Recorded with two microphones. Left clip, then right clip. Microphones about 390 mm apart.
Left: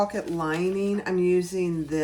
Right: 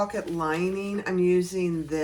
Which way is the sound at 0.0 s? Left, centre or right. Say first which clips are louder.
Left 1 dB; centre.